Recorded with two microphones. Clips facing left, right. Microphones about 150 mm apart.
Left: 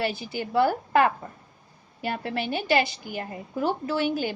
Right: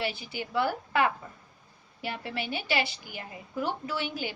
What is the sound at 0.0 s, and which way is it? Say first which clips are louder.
A woman's voice: left 5 dB; 45° left (ahead or behind).